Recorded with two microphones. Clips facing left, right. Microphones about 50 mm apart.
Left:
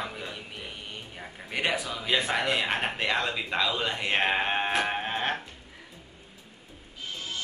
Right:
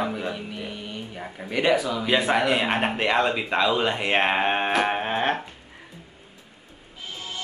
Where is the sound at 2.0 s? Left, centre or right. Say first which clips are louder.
Right 3 dB; centre.